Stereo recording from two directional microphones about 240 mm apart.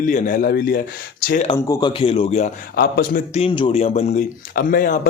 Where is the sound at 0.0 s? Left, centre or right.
Left.